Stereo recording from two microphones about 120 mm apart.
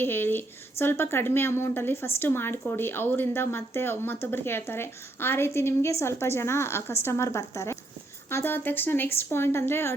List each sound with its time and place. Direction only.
0.0 s a woman's voice: 15° left (ahead or behind)